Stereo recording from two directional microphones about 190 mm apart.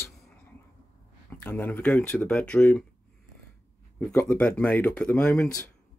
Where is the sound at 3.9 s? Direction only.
5° left (ahead or behind).